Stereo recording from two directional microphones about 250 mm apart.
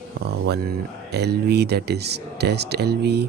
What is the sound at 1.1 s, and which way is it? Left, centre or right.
Speech, right.